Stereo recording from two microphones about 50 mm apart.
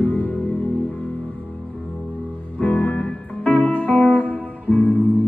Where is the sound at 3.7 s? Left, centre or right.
Left.